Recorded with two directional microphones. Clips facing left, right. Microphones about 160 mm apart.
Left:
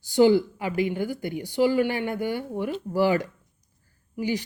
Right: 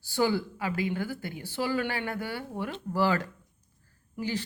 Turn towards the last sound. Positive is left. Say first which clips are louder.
# left 5 dB
turn(degrees=15)  # may be behind; listen again after turning